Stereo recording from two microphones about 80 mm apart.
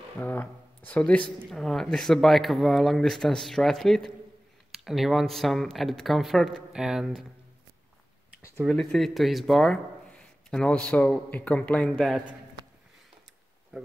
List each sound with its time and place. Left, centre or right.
0.2 s speech: left
1.5 s speech: centre
8.6 s speech: centre
10.5 s a man's voice: centre
13.7 s speech: centre